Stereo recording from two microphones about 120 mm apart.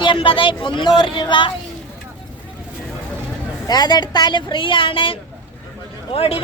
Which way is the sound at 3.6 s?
35° left (ahead or behind).